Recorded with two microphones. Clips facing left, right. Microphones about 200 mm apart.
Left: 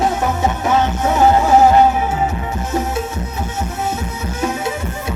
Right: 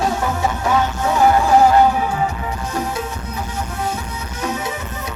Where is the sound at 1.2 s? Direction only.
20° left (ahead or behind).